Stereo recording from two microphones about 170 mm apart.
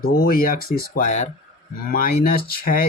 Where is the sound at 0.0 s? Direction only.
60° left (ahead or behind).